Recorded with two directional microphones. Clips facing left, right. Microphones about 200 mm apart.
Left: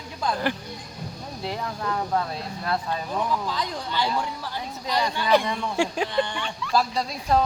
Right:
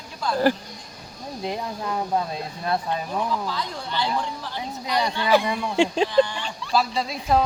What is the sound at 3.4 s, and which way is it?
Speech, 15° left (ahead or behind).